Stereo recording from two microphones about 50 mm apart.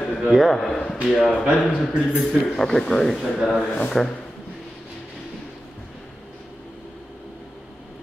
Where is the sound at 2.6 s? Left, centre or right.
Centre.